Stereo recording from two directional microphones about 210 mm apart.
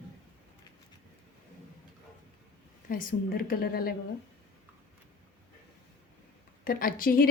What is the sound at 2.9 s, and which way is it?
A woman's voice, 45° left (ahead or behind).